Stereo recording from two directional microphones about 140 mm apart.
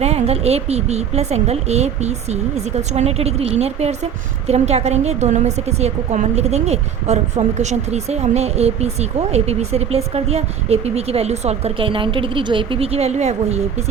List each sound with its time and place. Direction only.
0.0 s speech: 50° right (ahead or behind)